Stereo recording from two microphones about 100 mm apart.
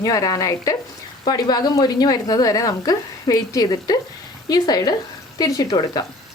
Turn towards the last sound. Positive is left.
turn(degrees=45)  # may be behind; listen again after turning